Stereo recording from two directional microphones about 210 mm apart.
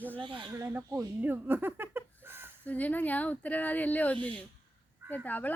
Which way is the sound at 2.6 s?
5° left (ahead or behind).